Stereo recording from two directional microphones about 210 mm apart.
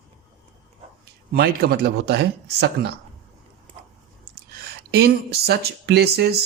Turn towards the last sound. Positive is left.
turn(degrees=-50)  # may be behind; listen again after turning